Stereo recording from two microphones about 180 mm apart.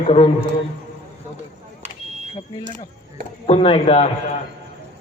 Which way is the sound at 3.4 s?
35° left (ahead or behind).